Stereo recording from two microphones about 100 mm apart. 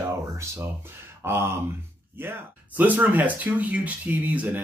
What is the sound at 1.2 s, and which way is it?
Speech, 25° right (ahead or behind).